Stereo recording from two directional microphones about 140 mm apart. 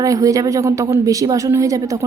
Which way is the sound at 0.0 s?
25° right (ahead or behind).